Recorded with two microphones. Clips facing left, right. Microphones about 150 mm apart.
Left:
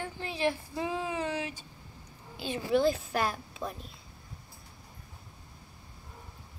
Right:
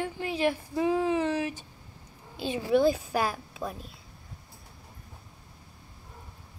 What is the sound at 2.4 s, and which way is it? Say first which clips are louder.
Speech: right 3 dB; 10° right (ahead or behind).